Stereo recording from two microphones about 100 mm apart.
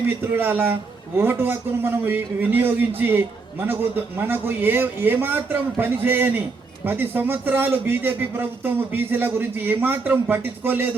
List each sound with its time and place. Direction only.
0.3 s a man's voice: 20° right (ahead or behind)